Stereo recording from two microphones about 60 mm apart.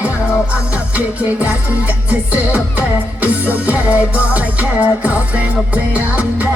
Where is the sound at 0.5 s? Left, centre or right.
Right.